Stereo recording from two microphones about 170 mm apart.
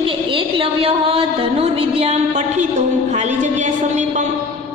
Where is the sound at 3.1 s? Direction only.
45° right (ahead or behind).